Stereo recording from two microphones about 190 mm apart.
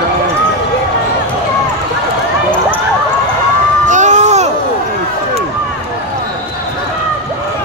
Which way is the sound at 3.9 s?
40° right (ahead or behind).